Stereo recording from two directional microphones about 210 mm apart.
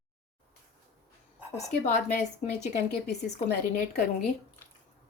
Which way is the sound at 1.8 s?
35° left (ahead or behind).